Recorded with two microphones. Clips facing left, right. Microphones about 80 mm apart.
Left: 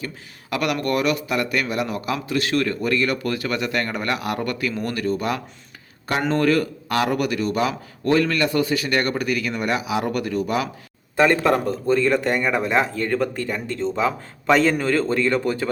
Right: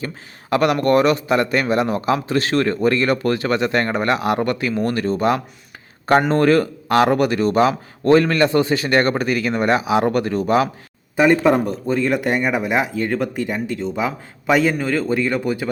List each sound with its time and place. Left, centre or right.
0.5 s a man's voice: right
6.1 s a man's voice: right
11.2 s speech: centre